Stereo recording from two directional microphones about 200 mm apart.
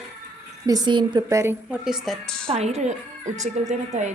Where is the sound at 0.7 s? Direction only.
20° right (ahead or behind); by 2.5 s 5° left (ahead or behind).